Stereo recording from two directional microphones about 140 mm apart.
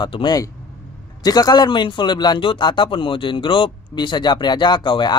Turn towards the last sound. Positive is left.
turn(degrees=35)  # may be behind; listen again after turning